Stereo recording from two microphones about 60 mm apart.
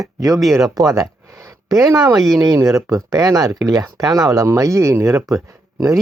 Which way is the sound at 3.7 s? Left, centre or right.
Right.